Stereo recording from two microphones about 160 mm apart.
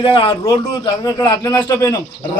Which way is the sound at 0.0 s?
30° left (ahead or behind).